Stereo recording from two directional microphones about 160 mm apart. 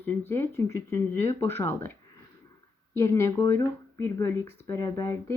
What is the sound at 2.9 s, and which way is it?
Speech, 15° left (ahead or behind).